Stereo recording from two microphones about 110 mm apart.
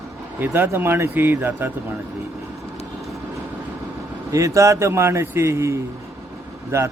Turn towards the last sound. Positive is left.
turn(degrees=-20)  # may be behind; listen again after turning